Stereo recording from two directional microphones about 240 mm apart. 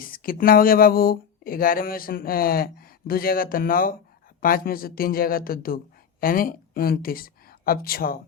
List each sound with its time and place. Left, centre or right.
0.0 s speech: left